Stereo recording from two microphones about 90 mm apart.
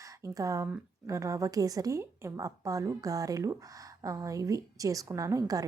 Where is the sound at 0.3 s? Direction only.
40° right (ahead or behind).